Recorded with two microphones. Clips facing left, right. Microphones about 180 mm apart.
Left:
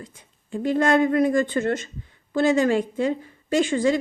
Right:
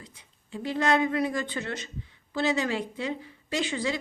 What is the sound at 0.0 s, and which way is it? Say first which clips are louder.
A woman's voice: left 8 dB; 50° left (ahead or behind).